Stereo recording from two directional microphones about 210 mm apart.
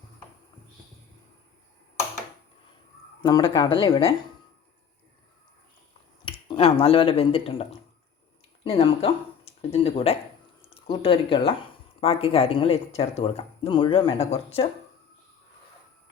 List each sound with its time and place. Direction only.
3.2 s speech: 20° left (ahead or behind)
6.2 s speech: 25° left (ahead or behind)